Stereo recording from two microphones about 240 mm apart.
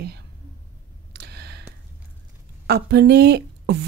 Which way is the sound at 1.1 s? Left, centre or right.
Right.